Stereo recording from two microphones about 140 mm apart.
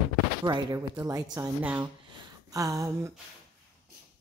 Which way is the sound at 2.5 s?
25° right (ahead or behind).